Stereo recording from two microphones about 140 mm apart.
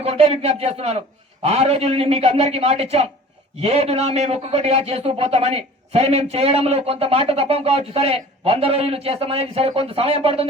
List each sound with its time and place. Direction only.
0.0 s speech: 45° right (ahead or behind)